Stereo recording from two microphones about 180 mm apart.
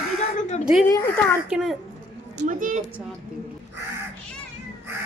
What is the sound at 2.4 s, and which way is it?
Speech, 45° right (ahead or behind).